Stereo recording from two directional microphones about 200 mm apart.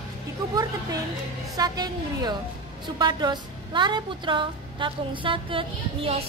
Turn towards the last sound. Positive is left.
turn(degrees=-25)  # may be behind; listen again after turning